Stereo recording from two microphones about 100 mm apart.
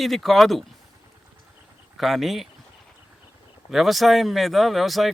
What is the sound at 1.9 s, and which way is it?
Speech, centre (ahead or behind).